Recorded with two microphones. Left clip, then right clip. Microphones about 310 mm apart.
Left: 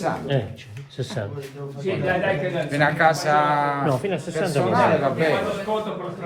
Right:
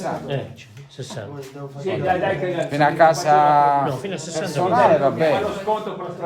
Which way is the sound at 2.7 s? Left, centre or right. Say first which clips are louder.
Right 4 dB; right.